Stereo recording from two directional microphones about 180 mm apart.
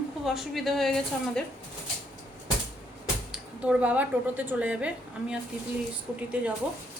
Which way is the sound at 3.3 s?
5° right (ahead or behind).